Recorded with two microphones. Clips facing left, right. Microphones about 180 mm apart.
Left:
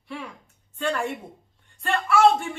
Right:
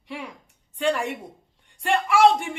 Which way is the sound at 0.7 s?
15° right (ahead or behind).